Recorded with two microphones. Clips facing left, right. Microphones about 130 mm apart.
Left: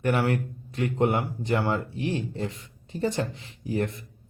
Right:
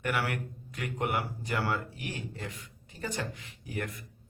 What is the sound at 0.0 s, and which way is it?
Speech, 30° left (ahead or behind).